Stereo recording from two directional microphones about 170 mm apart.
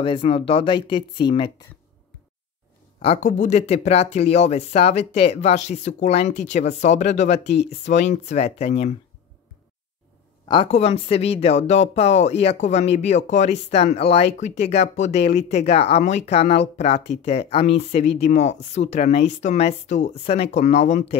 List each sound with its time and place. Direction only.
0.0 s speech: 30° left (ahead or behind)
3.0 s speech: 40° left (ahead or behind)
10.5 s speech: 35° left (ahead or behind)